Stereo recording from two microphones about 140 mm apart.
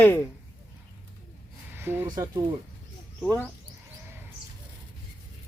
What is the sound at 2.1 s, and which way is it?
Speech, 25° right (ahead or behind).